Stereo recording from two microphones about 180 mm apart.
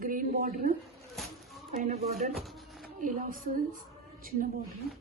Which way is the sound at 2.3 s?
Centre (ahead or behind).